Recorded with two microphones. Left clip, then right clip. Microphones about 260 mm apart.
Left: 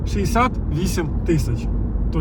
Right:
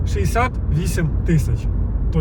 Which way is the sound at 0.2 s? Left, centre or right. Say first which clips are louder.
Left 1 dB; centre.